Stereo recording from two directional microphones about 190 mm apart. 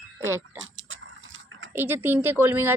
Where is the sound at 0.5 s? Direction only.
90° right.